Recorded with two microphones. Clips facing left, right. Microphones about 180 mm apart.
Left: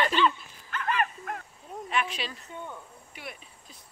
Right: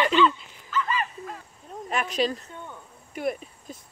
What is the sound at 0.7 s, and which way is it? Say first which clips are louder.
Dog: right 1 dB; 60° left (ahead or behind).